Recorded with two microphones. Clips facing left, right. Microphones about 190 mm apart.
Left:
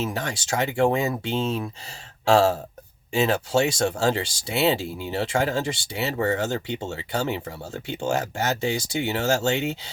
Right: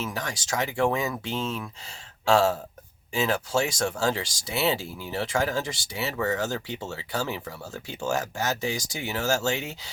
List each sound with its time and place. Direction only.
0.0 s speech: 25° left (ahead or behind)